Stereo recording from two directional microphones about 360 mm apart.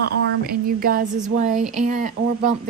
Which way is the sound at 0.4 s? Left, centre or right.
Right.